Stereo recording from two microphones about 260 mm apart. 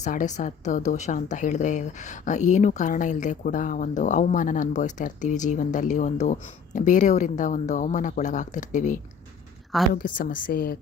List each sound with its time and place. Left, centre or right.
0.0 s a woman's voice: left